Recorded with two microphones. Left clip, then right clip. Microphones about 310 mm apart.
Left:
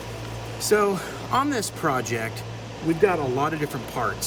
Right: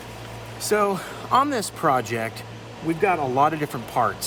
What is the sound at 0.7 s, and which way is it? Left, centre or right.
Speech, centre.